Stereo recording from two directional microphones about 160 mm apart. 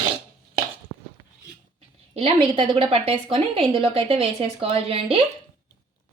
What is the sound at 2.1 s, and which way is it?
A woman's voice, 35° right (ahead or behind).